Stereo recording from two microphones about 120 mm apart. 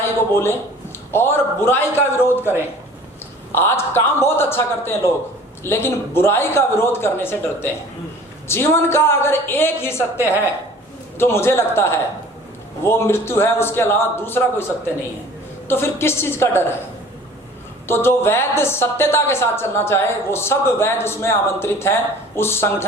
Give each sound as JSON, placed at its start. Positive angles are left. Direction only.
{"t": 0.0, "sound": "a woman's voice", "side_deg": 20}
{"t": 3.5, "sound": "a woman's voice", "side_deg": 20}
{"t": 11.2, "sound": "a woman's voice", "side_deg": 20}
{"t": 15.6, "sound": "a woman's voice", "side_deg": 20}
{"t": 17.8, "sound": "a woman's voice", "side_deg": 20}